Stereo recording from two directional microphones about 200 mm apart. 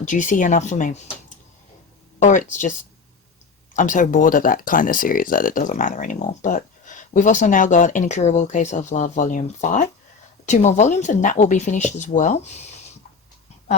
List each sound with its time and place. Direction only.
0.0 s speech: 40° left (ahead or behind)
2.1 s speech: 40° left (ahead or behind)
3.8 s speech: 40° left (ahead or behind)